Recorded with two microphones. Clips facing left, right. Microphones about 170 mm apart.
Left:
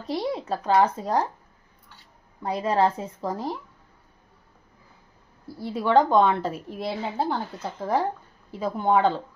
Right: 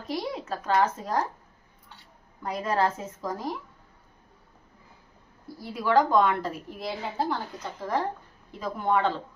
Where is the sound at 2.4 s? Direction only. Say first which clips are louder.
Left 4 dB; 30° left (ahead or behind).